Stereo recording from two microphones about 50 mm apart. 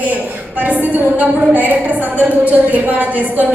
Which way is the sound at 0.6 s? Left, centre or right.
Right.